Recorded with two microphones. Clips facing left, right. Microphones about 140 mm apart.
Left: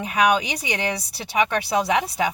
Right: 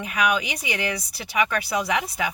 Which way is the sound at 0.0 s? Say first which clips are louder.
Left 4 dB; 30° left (ahead or behind).